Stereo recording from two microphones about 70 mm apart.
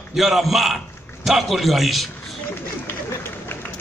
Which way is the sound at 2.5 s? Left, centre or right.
Left.